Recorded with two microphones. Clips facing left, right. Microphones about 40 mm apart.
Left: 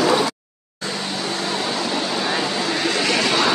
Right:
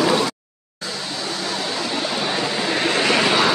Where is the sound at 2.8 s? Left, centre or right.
Right.